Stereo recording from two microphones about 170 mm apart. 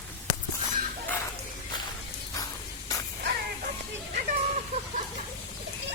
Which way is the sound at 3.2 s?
65° right (ahead or behind).